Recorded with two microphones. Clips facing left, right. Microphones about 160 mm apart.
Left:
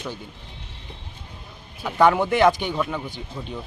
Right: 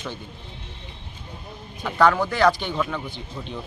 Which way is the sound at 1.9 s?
20° left (ahead or behind).